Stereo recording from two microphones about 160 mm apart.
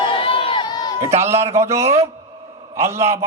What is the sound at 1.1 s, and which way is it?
A man's voice, 15° right (ahead or behind).